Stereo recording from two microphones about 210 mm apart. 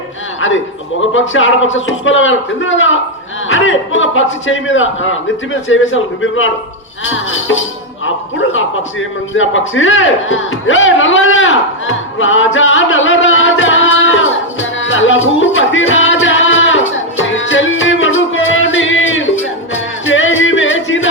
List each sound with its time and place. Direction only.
1.3 s a man's voice: 65° left (ahead or behind)
7.0 s music: 65° left (ahead or behind)
8.0 s a sound: 65° left (ahead or behind)
19.7 s music: 65° left (ahead or behind)